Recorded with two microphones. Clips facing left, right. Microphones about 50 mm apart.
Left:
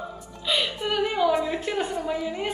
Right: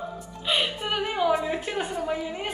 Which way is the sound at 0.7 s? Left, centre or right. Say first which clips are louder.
Left 2 dB; centre.